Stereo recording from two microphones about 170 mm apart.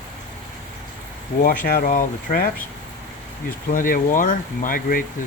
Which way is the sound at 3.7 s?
55° left (ahead or behind).